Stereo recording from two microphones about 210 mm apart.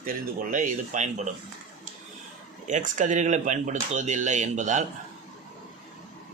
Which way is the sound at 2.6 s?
35° right (ahead or behind).